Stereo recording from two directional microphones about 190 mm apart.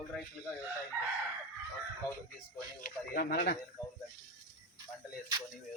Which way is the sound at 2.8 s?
50° left (ahead or behind).